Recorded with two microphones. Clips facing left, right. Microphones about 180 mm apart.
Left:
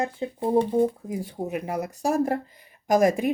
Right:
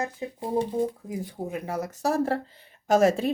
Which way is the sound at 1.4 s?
20° left (ahead or behind).